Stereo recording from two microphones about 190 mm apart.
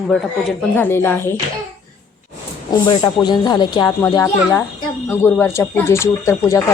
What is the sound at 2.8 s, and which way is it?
Speech, 25° left (ahead or behind).